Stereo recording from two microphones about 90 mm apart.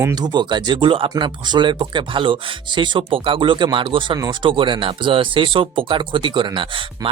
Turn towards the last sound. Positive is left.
turn(degrees=-65)  # may be behind; listen again after turning